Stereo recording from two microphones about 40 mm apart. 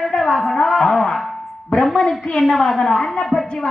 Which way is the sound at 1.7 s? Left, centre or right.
Left.